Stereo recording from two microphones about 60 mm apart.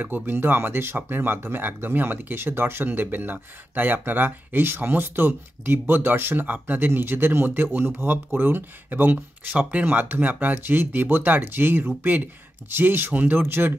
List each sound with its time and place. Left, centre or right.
0.0 s speech: right